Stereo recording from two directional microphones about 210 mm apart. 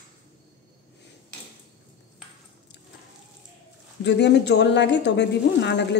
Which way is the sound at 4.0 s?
55° left (ahead or behind).